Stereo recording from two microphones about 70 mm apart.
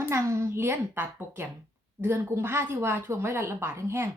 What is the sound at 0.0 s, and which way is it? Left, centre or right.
Speech, right.